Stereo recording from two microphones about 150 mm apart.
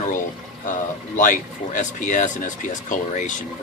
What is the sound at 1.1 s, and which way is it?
Speech, 60° left (ahead or behind).